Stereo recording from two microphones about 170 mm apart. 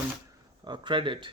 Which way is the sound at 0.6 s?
25° right (ahead or behind).